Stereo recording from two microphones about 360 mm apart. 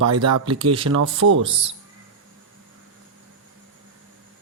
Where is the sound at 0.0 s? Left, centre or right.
Right.